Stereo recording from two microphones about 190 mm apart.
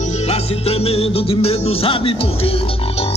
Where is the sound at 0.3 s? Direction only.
30° left (ahead or behind).